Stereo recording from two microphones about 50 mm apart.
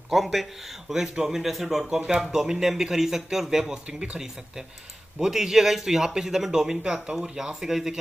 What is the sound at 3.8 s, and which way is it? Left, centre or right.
Speech, right.